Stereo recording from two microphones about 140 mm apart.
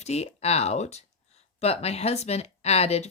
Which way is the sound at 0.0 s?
50° left (ahead or behind).